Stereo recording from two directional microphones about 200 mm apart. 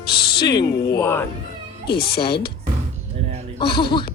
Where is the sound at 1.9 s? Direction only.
50° left (ahead or behind).